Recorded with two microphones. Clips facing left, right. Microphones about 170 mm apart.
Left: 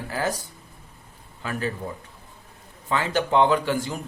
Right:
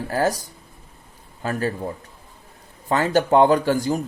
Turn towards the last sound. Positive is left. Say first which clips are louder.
# right 5 dB
turn(degrees=-40)  # may be behind; listen again after turning